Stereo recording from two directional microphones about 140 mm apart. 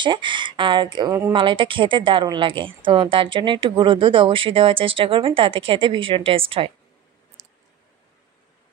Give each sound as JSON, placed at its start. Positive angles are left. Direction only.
{"t": 0.0, "sound": "a woman's voice", "side_deg": -35}